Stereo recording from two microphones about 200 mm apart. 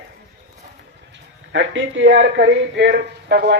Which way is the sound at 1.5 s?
70° right (ahead or behind).